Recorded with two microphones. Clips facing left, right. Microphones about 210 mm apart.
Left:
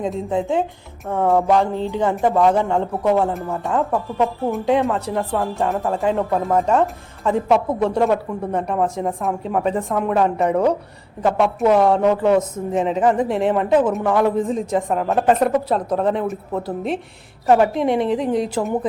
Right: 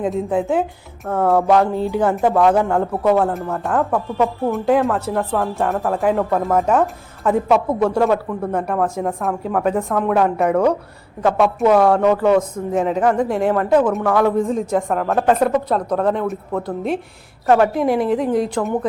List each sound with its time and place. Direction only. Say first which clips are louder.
0.0 s speech: right 2 dB; 5° right (ahead or behind)
11.6 s speech: right 1 dB; centre (ahead or behind)
14.0 s a man's voice: right 1 dB; 20° left (ahead or behind)
14.3 s speech: right 2 dB; centre (ahead or behind)